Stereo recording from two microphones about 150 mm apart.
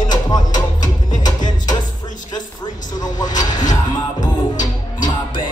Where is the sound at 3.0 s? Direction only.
25° left (ahead or behind).